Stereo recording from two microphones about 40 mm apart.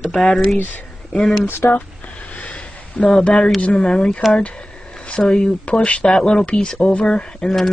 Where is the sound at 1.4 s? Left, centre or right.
Left.